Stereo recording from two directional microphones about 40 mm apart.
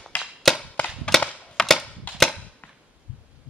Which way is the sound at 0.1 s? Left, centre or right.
Left.